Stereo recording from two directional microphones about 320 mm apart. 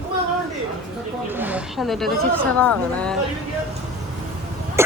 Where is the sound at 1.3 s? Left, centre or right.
Centre.